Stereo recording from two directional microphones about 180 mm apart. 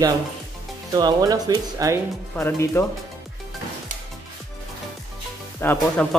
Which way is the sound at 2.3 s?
15° left (ahead or behind).